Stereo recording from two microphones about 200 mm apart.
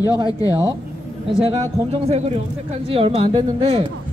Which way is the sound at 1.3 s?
25° right (ahead or behind).